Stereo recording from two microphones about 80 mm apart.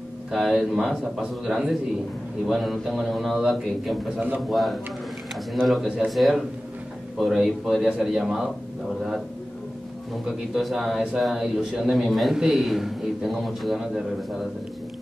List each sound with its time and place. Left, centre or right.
0.3 s a man's voice: centre
10.2 s a man's voice: centre